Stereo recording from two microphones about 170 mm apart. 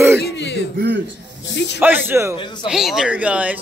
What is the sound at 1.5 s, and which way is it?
Snake, 90° left.